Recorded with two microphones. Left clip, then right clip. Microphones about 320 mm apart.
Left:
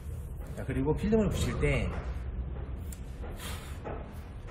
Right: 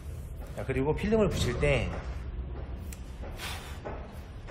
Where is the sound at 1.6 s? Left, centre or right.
Right.